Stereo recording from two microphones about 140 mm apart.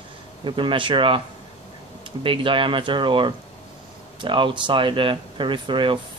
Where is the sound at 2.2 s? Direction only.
40° right (ahead or behind).